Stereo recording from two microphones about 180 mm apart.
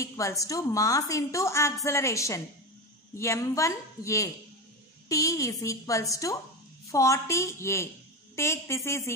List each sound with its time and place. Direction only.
0.0 s a woman's voice: 15° left (ahead or behind)